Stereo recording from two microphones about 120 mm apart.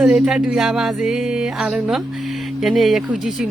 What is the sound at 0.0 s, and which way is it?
Speech, 5° right (ahead or behind).